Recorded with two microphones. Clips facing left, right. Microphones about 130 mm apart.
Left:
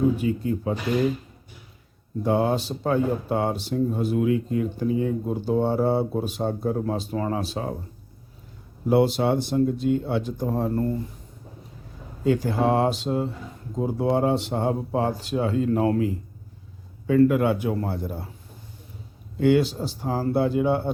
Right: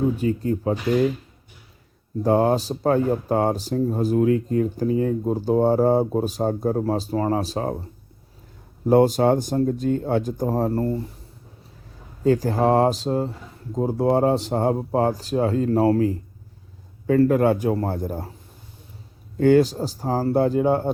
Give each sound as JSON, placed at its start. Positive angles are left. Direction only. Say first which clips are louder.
{"t": 0.2, "sound": "speech", "louder": "right 2 dB", "side_deg": -45}
{"t": 2.2, "sound": "speech", "louder": "right 4 dB", "side_deg": -40}
{"t": 8.9, "sound": "speech", "louder": "right 4 dB", "side_deg": -45}
{"t": 12.2, "sound": "speech", "louder": "right 3 dB", "side_deg": -40}
{"t": 19.4, "sound": "speech", "louder": "right 4 dB", "side_deg": -40}